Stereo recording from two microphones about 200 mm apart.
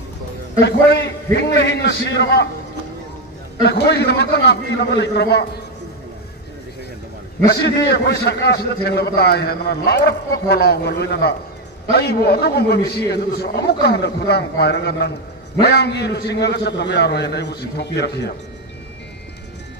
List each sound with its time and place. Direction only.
0.7 s a man's voice: 55° left (ahead or behind)
3.6 s a man's voice: 55° left (ahead or behind)
7.4 s a man's voice: 55° left (ahead or behind)